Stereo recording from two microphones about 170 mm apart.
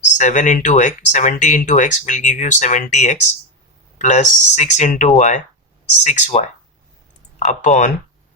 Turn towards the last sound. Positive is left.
turn(degrees=45)  # may be behind; listen again after turning